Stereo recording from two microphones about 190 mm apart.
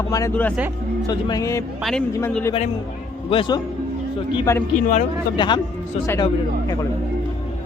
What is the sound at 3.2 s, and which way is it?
Speech, 25° left (ahead or behind).